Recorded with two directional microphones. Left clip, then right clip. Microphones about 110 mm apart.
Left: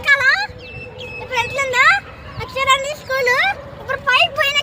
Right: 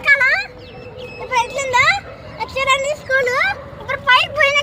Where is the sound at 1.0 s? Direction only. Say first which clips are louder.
Right 2 dB; centre (ahead or behind).